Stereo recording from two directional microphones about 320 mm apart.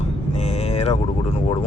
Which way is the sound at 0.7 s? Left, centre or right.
Centre.